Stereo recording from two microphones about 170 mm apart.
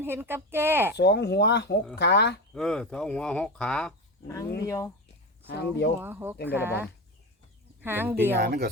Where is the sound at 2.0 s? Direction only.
85° left.